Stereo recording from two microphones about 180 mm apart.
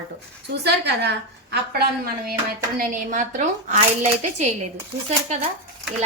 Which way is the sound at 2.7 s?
50° right (ahead or behind).